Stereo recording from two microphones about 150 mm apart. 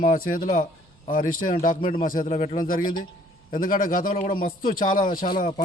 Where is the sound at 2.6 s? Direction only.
70° left (ahead or behind).